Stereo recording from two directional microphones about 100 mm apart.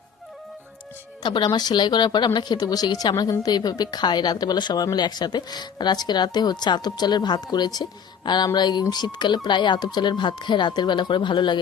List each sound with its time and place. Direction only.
1.2 s speech: 45° left (ahead or behind)